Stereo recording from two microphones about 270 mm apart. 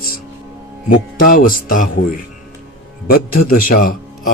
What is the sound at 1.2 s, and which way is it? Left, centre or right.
Speech, left.